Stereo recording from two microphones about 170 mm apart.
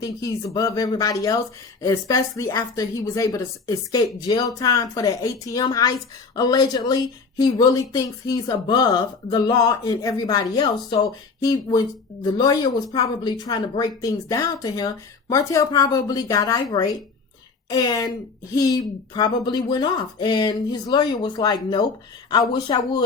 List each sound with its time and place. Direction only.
0.0 s speech: 20° left (ahead or behind)